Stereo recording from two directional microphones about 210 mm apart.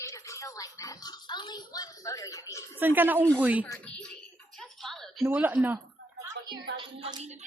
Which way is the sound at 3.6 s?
5° left (ahead or behind).